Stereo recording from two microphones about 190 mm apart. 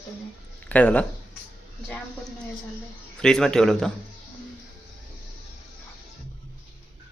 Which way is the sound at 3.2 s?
5° left (ahead or behind).